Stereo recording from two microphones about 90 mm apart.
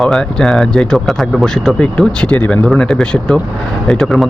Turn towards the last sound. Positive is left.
turn(degrees=5)  # may be behind; listen again after turning